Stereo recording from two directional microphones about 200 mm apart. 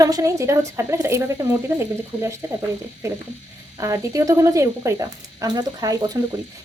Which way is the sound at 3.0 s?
15° right (ahead or behind).